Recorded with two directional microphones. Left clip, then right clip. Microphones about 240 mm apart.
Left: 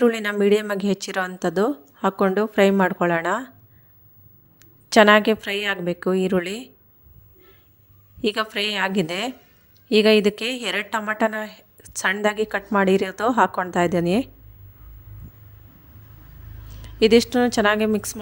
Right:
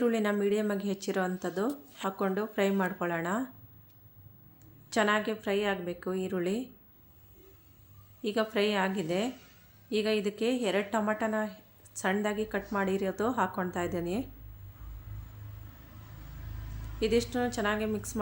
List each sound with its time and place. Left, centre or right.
0.0 s a woman's voice: left
4.6 s a woman's voice: left
8.2 s a woman's voice: left
17.0 s a woman's voice: left